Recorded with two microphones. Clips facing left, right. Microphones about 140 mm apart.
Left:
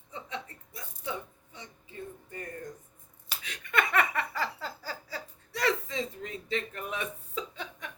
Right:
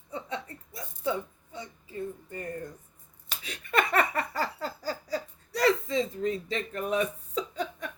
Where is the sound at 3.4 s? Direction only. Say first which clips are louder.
Right 3 dB; 35° right (ahead or behind).